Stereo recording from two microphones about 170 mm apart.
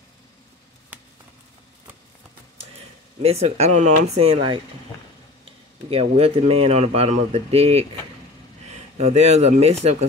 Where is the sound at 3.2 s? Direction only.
40° right (ahead or behind).